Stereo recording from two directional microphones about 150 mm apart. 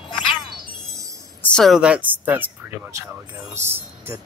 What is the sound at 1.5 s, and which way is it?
Speech, centre (ahead or behind).